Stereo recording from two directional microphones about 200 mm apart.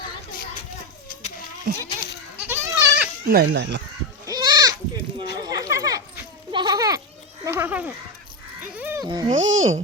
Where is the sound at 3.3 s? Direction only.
50° right (ahead or behind).